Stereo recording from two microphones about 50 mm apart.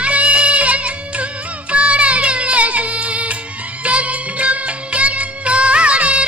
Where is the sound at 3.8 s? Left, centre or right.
Right.